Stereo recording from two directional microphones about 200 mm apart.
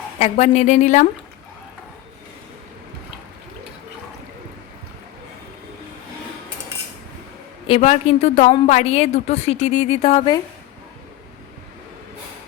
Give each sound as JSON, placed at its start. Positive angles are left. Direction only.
{"t": 0.2, "sound": "a woman's voice", "side_deg": 35}
{"t": 7.7, "sound": "a woman's voice", "side_deg": 35}